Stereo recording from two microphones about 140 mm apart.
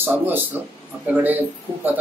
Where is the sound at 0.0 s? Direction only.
15° right (ahead or behind).